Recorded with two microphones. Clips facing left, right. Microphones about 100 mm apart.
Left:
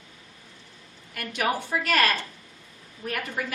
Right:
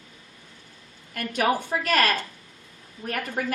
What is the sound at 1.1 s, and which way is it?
A woman's voice, 40° right (ahead or behind).